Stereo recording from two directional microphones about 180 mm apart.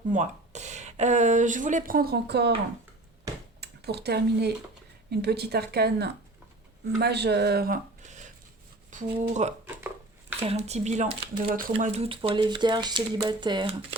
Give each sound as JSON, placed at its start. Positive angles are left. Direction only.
{"t": 0.1, "sound": "speech", "side_deg": -40}
{"t": 3.6, "sound": "speech", "side_deg": -65}
{"t": 9.6, "sound": "a sound", "side_deg": -10}
{"t": 10.4, "sound": "speech", "side_deg": -35}